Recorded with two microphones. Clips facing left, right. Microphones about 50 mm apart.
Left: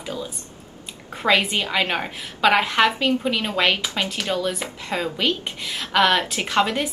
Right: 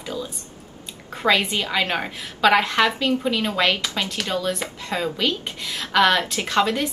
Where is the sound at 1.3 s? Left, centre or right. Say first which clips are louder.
Left 1 dB; centre.